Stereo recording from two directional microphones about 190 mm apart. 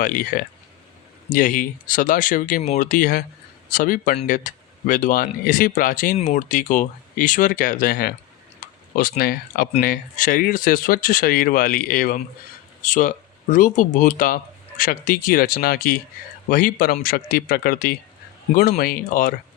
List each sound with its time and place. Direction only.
0.0 s speech: 50° left (ahead or behind)